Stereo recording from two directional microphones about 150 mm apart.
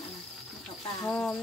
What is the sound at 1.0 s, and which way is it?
Speech, 10° left (ahead or behind).